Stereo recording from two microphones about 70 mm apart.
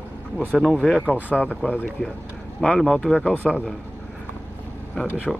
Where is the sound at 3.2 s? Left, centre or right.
Left.